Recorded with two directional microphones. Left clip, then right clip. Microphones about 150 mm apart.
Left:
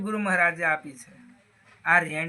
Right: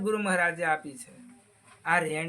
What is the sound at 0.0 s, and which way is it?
Speech, 25° right (ahead or behind).